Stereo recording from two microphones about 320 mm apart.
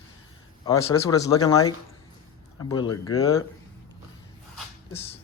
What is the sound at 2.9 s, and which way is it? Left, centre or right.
Speech, left.